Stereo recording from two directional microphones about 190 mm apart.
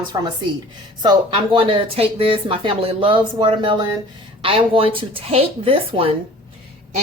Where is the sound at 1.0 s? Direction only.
25° right (ahead or behind).